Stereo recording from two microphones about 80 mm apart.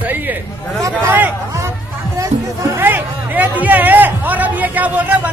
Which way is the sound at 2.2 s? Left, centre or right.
Right.